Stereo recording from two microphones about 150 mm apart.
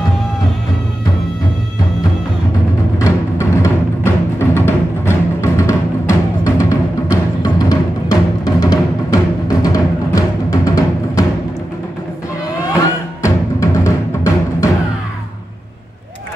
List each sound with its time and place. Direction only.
3.0 s music: 20° left (ahead or behind)
13.2 s music: 20° left (ahead or behind)